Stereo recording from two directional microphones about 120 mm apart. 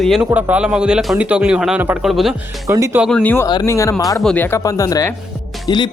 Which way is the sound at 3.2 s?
15° left (ahead or behind).